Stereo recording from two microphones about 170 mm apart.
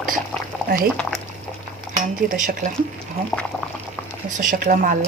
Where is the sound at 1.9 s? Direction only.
50° right (ahead or behind).